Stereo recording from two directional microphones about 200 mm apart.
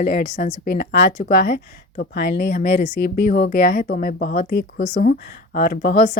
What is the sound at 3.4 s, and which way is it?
Speech, 50° left (ahead or behind).